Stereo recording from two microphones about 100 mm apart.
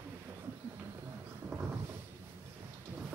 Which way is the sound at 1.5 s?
25° right (ahead or behind).